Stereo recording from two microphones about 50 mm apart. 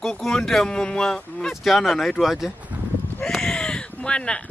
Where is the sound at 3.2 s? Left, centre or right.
Centre.